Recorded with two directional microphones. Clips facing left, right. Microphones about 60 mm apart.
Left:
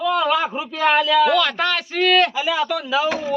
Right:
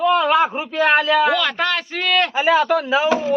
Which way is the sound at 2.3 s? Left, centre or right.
Right.